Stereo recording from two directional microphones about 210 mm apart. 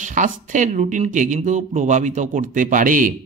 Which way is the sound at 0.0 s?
35° right (ahead or behind).